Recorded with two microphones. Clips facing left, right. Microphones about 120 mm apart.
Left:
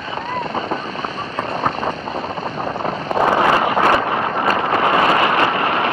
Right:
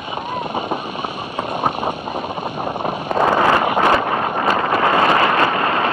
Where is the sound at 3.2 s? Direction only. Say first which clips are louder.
Even; 25° left (ahead or behind).